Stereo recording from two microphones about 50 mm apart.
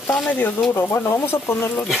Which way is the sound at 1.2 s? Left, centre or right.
Left.